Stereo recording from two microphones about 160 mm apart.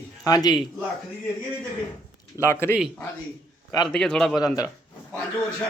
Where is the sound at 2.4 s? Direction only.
15° left (ahead or behind).